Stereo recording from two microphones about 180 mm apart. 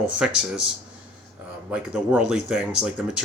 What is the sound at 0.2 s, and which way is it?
Speech, 5° right (ahead or behind).